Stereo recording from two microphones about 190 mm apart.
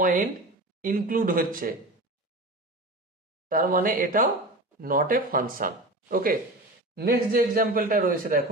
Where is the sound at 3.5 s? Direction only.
45° right (ahead or behind).